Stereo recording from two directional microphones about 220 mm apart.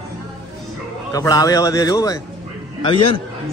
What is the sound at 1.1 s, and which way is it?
A man's voice, 15° left (ahead or behind).